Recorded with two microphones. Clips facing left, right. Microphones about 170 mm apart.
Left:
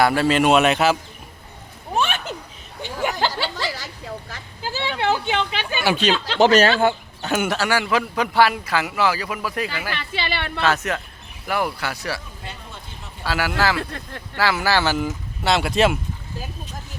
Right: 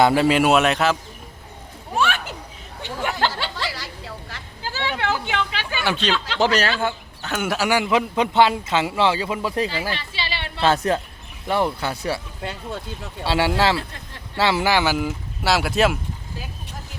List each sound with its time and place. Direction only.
0.0 s a man's voice: 15° right (ahead or behind); by 0.9 s 5° left (ahead or behind)
2.0 s a sound: 20° left (ahead or behind)
2.8 s a sound: 10° left (ahead or behind)
4.7 s goat: 20° left (ahead or behind)
6.1 s speech: 25° left (ahead or behind)
7.4 s a man's voice: 5° right (ahead or behind)
7.7 s a man's voice: 15° right (ahead or behind)
10.0 s a woman's voice: 55° left (ahead or behind)
10.6 s a man's voice: 30° right (ahead or behind)
12.4 s speech: 70° right (ahead or behind)
13.2 s a man's voice: 25° right (ahead or behind); by 16.0 s centre (ahead or behind)